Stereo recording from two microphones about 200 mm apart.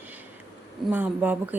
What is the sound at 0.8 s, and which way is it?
Speech, 10° right (ahead or behind).